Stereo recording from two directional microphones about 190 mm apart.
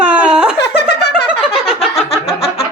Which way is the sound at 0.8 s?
60° left (ahead or behind).